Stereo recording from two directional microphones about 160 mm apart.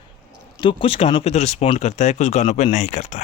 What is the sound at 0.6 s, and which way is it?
Speech, 30° left (ahead or behind).